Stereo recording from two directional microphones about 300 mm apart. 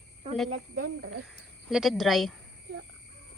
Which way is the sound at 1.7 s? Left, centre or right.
Centre.